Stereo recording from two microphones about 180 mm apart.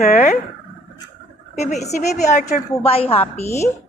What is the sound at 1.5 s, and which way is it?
A woman's voice, 40° left (ahead or behind).